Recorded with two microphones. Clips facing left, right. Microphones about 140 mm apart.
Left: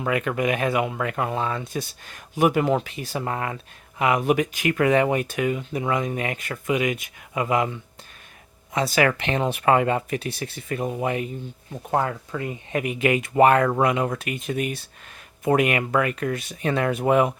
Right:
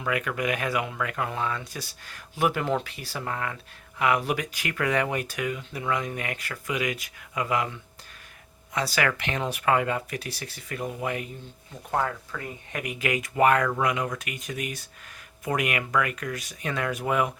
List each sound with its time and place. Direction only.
0.0 s speech: 30° left (ahead or behind)
8.7 s speech: 25° left (ahead or behind)